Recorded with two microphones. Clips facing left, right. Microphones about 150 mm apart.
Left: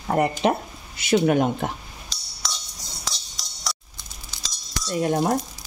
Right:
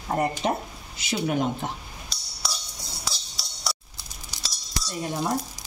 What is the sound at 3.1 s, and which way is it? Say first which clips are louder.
Music: left 2 dB; centre (ahead or behind).